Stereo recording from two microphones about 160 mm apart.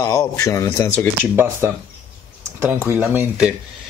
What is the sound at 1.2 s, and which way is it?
Speech, 15° right (ahead or behind).